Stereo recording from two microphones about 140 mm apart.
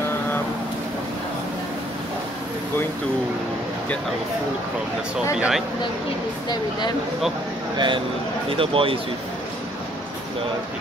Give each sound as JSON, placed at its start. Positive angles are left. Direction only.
{"t": 5.3, "sound": "speech", "side_deg": -5}
{"t": 7.7, "sound": "speech", "side_deg": -35}